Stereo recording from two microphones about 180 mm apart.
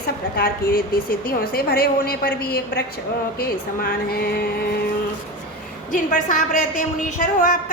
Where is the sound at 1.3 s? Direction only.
55° left (ahead or behind).